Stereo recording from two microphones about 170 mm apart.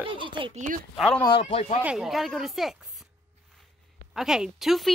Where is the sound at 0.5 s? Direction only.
50° right (ahead or behind).